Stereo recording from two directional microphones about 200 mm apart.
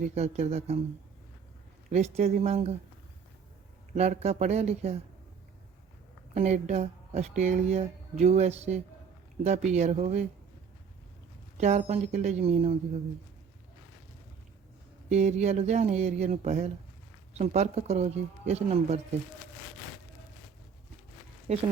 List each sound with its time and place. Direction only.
0.1 s speech: 35° right (ahead or behind)
1.9 s speech: 30° right (ahead or behind)
3.9 s speech: 35° right (ahead or behind)
6.3 s speech: 35° right (ahead or behind)
11.5 s speech: 35° right (ahead or behind)
15.1 s speech: 35° right (ahead or behind)
21.5 s speech: 35° right (ahead or behind)